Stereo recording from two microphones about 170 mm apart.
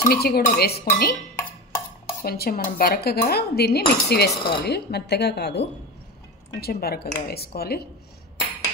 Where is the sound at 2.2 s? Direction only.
65° left (ahead or behind).